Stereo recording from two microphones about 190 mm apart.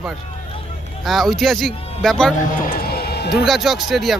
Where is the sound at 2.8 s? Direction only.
55° left (ahead or behind).